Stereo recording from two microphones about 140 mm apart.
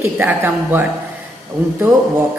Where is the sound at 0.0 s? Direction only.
15° right (ahead or behind).